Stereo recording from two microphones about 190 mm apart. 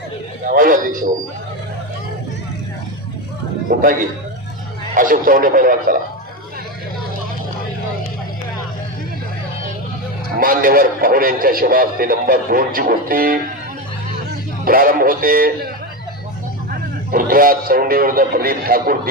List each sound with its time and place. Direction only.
0.5 s a man's voice: 45° right (ahead or behind)
3.7 s a man's voice: 50° right (ahead or behind)
4.9 s a man's voice: 45° right (ahead or behind)
10.4 s a man's voice: 50° right (ahead or behind)
14.6 s a man's voice: 50° right (ahead or behind)
17.1 s a man's voice: 50° right (ahead or behind)